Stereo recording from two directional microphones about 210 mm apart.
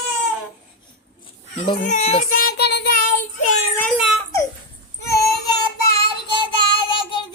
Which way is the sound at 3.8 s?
Centre (ahead or behind).